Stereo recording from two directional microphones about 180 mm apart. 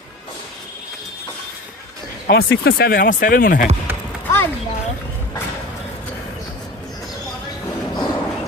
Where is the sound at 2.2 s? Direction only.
60° left (ahead or behind).